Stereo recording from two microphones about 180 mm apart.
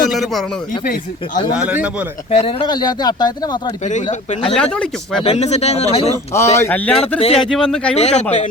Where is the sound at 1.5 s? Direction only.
5° right (ahead or behind).